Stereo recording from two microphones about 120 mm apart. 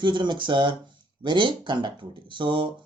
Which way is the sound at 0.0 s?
40° right (ahead or behind).